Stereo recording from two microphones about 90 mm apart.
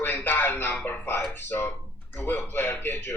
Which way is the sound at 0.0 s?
20° left (ahead or behind).